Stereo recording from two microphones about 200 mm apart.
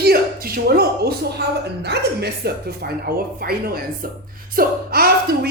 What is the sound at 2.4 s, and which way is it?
A woman's voice, 55° right (ahead or behind).